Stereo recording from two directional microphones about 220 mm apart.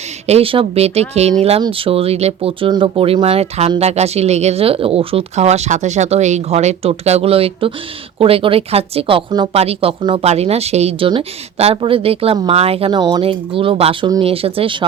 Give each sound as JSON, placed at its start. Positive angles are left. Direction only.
{"t": 0.3, "sound": "speech", "side_deg": -25}